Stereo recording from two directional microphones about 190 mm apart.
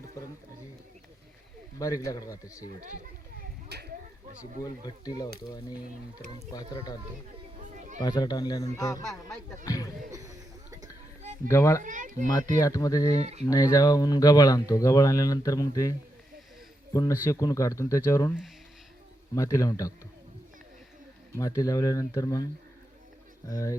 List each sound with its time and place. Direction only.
1.8 s speech: 15° left (ahead or behind)
3.7 s a sound: 60° right (ahead or behind)
4.6 s speech: 20° left (ahead or behind)
6.5 s speech: 20° left (ahead or behind)
7.5 s a sound: 40° right (ahead or behind)
7.9 s speech: 20° left (ahead or behind)
10.1 s chuckle: 20° right (ahead or behind)
11.4 s speech: 15° left (ahead or behind)
11.8 s speech: 45° right (ahead or behind)
12.3 s speech: 20° left (ahead or behind)
13.1 s speech: 35° right (ahead or behind)
13.5 s speech: 20° left (ahead or behind)
21.3 s speech: 15° left (ahead or behind)
23.5 s speech: 20° left (ahead or behind)